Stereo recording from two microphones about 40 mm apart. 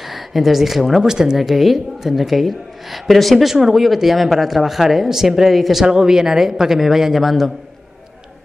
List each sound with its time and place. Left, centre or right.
0.1 s speech: centre
1.0 s a man's voice: centre
1.4 s a woman's voice: centre
3.4 s a man's voice: centre
5.9 s a man's voice: centre